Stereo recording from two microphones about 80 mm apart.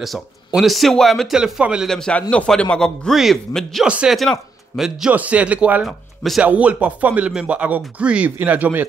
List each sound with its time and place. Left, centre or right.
0.5 s a man's voice: centre
1.9 s a man's voice: centre
3.8 s speech: centre
4.2 s a man's voice: centre
5.1 s speech: centre
5.9 s speech: centre
6.4 s speech: centre